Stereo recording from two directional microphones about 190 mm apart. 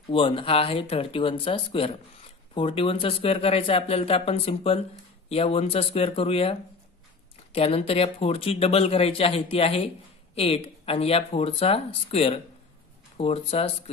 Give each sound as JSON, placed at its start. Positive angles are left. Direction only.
{"t": 0.1, "sound": "speech", "side_deg": 30}
{"t": 7.5, "sound": "speech", "side_deg": 30}